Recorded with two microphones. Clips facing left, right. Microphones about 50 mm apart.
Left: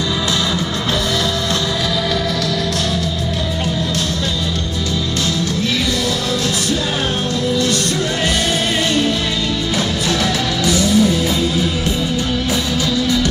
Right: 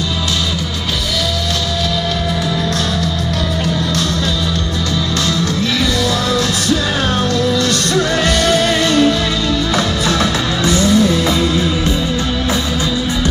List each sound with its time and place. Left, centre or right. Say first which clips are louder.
8.5 s music: right 4 dB; right
10.7 s music: right 2 dB; right